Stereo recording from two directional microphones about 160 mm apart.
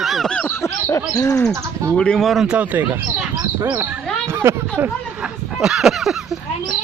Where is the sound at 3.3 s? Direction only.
20° right (ahead or behind).